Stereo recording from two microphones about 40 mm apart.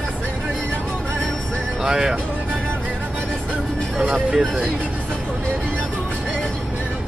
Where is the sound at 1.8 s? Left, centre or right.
Centre.